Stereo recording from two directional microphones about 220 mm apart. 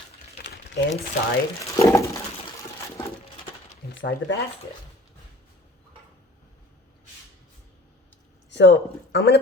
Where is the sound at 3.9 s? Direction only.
55° left (ahead or behind).